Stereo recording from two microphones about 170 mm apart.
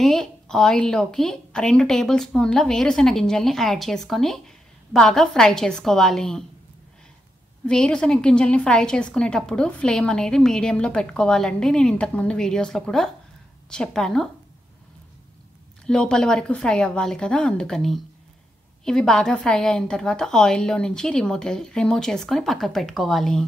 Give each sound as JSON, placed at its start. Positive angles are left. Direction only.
{"t": 0.0, "sound": "a woman's voice", "side_deg": 0}
{"t": 7.6, "sound": "a woman's voice", "side_deg": 5}
{"t": 15.8, "sound": "a woman's voice", "side_deg": 5}